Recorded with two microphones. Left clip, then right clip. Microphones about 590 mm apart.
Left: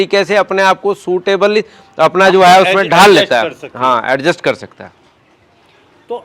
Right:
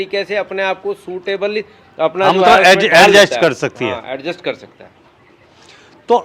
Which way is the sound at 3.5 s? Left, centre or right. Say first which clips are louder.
Right 9 dB; right.